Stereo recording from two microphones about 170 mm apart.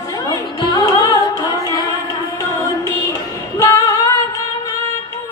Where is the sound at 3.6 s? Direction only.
15° left (ahead or behind).